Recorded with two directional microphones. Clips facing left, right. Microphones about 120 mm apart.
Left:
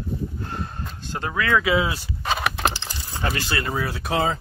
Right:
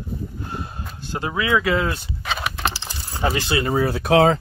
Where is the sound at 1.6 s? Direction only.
5° left (ahead or behind).